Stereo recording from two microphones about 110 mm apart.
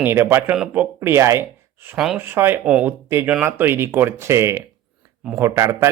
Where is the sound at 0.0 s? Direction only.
20° right (ahead or behind).